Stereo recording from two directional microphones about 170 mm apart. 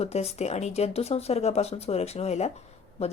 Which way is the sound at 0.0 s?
40° left (ahead or behind).